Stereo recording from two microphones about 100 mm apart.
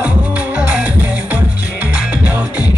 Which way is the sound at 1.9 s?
15° right (ahead or behind).